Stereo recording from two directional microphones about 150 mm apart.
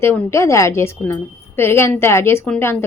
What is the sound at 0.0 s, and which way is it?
A woman's voice, 15° left (ahead or behind).